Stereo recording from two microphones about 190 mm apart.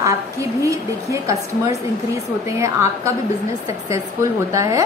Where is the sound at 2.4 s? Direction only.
15° right (ahead or behind).